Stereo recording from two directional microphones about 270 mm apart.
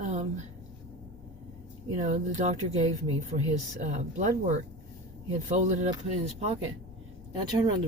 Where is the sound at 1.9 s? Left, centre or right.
Right.